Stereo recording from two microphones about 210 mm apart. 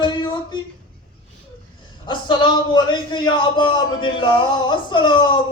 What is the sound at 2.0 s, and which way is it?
A woman's voice, 20° left (ahead or behind).